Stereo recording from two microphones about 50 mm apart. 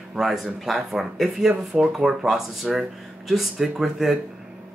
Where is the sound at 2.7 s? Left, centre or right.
Centre.